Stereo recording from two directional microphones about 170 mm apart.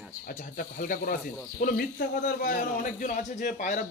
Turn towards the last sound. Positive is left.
turn(degrees=45)  # may be behind; listen again after turning